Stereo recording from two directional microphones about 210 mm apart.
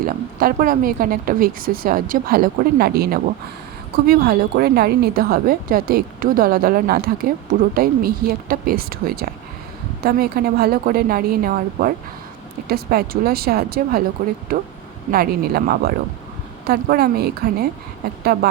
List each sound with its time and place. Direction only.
0.0 s speech: 40° right (ahead or behind)